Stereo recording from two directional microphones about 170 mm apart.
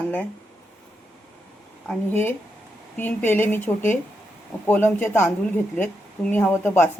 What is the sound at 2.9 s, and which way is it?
A woman's voice, 10° left (ahead or behind).